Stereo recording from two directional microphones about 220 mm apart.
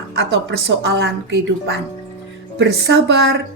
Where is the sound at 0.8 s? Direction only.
50° right (ahead or behind).